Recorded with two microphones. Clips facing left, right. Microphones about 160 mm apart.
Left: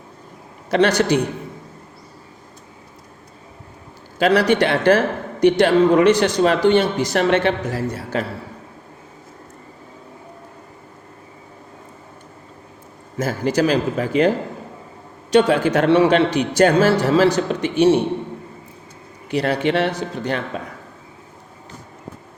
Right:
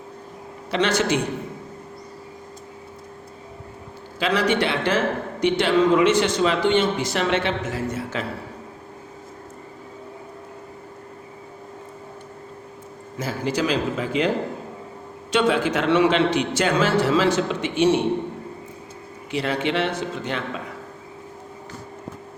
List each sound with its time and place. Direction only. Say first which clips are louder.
0.7 s a man's voice: left 5 dB; 40° left (ahead or behind)
4.2 s a man's voice: left 5 dB; 40° left (ahead or behind)
13.1 s speech: left 5 dB; 45° left (ahead or behind)
15.3 s a man's voice: left 5 dB; 40° left (ahead or behind)
19.3 s a man's voice: left 5 dB; 45° left (ahead or behind)